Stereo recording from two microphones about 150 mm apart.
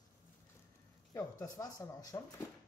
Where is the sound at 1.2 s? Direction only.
20° left (ahead or behind).